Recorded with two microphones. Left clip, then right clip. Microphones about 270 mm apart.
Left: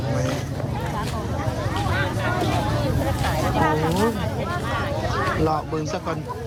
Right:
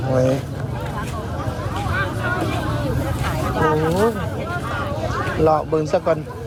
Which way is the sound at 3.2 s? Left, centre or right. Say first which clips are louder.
Right 2 dB; left.